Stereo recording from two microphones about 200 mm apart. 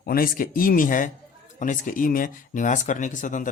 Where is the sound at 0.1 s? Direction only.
45° left (ahead or behind).